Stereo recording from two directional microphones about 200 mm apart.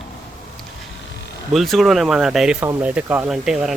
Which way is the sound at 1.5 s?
Centre (ahead or behind).